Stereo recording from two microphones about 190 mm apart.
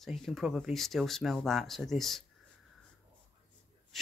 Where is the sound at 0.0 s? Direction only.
Centre (ahead or behind).